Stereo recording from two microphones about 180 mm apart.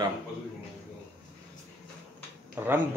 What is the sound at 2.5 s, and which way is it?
Speech, 10° right (ahead or behind).